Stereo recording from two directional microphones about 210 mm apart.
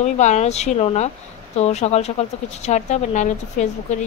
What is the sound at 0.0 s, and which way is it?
A woman's voice, 35° left (ahead or behind).